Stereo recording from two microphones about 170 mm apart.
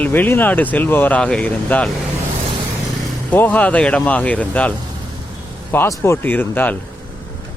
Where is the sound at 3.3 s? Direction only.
10° left (ahead or behind).